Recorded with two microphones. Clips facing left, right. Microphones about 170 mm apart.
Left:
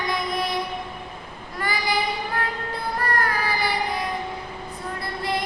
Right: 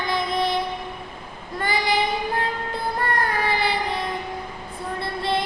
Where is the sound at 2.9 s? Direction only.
25° right (ahead or behind).